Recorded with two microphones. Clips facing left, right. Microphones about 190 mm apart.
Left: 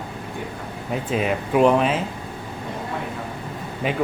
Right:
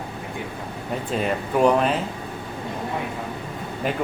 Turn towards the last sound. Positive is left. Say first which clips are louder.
# left 1 dB
turn(degrees=0)  # may be behind; listen again after turning